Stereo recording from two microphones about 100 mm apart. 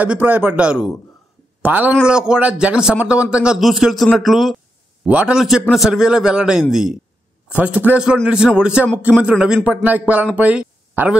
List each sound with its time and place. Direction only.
0.0 s a man's voice: 15° right (ahead or behind); by 4.6 s centre (ahead or behind)
5.0 s a man's voice: 15° right (ahead or behind)